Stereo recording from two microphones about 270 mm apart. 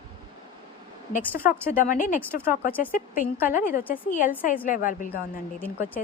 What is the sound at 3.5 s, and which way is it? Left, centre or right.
Speech, left.